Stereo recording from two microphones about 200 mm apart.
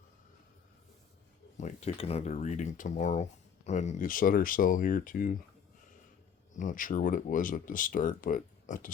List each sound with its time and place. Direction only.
1.5 s speech: 35° left (ahead or behind)
6.6 s speech: 40° left (ahead or behind)